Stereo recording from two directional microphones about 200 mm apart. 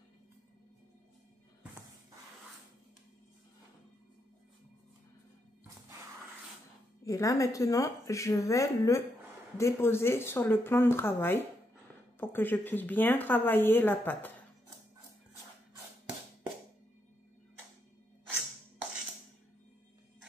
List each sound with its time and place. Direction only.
7.1 s a woman's voice: 15° left (ahead or behind)